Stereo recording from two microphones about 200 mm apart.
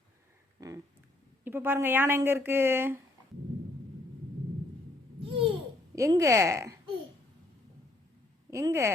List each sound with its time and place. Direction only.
0.6 s cat: 15° right (ahead or behind)
1.5 s speech: 10° right (ahead or behind)
5.2 s babbling: 25° right (ahead or behind)
6.0 s speech: 15° right (ahead or behind)
8.4 s speech: 15° right (ahead or behind)